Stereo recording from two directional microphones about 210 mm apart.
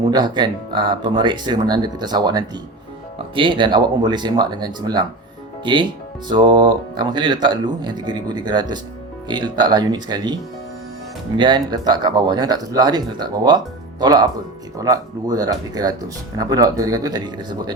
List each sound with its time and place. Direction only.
0.1 s speech: 20° right (ahead or behind)
11.3 s speech: 20° right (ahead or behind)